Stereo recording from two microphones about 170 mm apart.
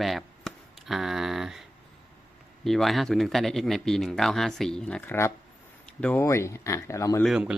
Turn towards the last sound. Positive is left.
turn(degrees=-5)  # may be behind; listen again after turning